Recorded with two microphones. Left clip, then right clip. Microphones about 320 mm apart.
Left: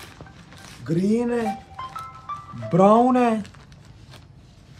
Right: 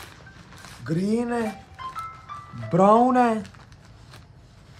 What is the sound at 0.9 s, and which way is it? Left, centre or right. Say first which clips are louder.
Speech: left 3 dB; centre.